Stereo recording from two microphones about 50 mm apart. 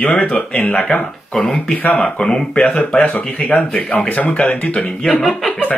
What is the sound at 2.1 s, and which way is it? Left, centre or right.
Speech, centre.